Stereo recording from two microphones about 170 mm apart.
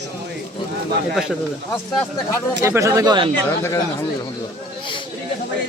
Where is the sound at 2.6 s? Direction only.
15° right (ahead or behind).